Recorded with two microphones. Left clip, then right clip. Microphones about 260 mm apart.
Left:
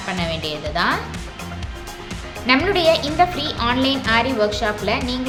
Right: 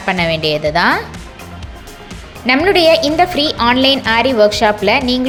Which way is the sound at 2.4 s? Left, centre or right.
Right.